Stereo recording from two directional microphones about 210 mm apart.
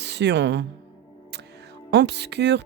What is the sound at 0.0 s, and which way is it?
Speech, 55° right (ahead or behind).